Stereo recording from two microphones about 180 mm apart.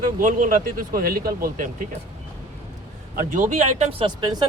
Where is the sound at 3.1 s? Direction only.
45° right (ahead or behind).